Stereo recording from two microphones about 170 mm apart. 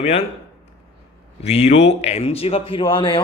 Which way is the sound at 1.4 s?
40° left (ahead or behind).